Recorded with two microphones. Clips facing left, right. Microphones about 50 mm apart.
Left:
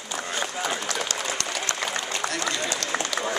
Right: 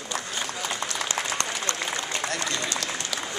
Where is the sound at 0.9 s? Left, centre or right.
Right.